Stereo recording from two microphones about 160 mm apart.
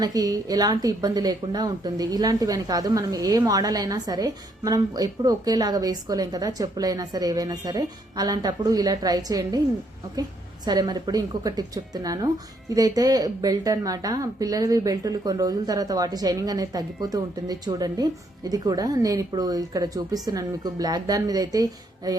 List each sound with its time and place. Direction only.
0.0 s a woman's voice: 25° right (ahead or behind)
10.7 s a woman's voice: 25° right (ahead or behind)